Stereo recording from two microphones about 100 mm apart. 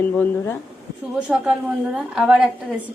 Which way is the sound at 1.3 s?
5° right (ahead or behind).